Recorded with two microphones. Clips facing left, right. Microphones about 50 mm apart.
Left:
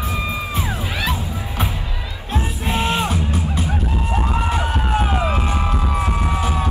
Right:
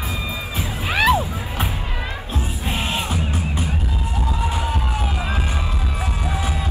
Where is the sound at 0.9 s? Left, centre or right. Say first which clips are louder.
Right 12 dB; right.